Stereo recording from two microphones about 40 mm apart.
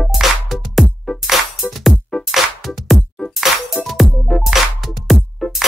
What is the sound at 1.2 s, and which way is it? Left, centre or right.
Music, centre.